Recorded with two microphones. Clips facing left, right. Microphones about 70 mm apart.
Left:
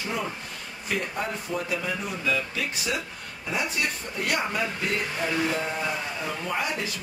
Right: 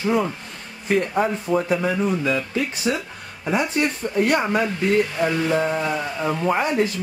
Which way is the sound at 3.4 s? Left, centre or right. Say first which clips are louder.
Right 8 dB; right.